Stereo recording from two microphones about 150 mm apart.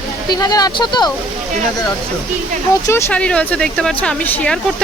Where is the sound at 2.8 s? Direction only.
20° left (ahead or behind).